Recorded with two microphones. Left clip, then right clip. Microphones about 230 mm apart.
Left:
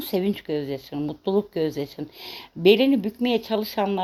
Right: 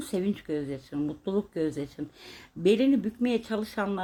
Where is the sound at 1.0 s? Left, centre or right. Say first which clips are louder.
Left 7 dB; left.